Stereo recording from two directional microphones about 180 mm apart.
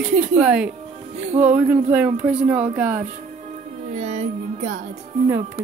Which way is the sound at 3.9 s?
40° right (ahead or behind).